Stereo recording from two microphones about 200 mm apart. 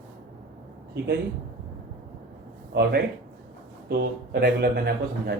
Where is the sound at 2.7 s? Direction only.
55° right (ahead or behind).